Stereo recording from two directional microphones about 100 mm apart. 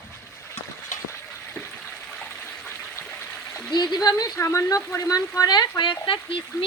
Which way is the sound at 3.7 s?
45° left (ahead or behind).